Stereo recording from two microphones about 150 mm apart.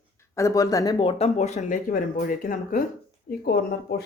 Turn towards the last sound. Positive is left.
turn(degrees=90)